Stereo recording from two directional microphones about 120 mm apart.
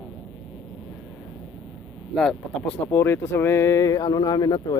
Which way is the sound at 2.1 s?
5° left (ahead or behind).